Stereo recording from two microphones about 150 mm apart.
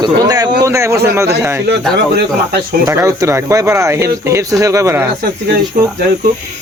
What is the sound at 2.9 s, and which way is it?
Speech, 20° right (ahead or behind).